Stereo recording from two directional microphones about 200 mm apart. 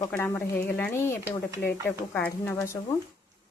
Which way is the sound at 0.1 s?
10° left (ahead or behind).